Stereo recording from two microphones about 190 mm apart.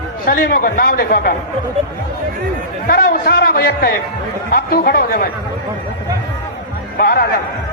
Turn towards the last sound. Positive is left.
turn(degrees=50)  # may be behind; listen again after turning